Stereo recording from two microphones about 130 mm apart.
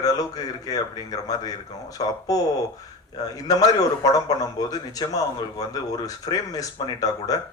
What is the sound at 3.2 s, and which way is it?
Speech, 30° left (ahead or behind).